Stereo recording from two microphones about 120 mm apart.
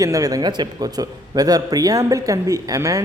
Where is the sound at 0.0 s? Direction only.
30° right (ahead or behind).